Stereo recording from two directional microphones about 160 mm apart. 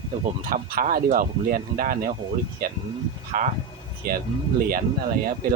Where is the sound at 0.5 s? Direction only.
65° right (ahead or behind).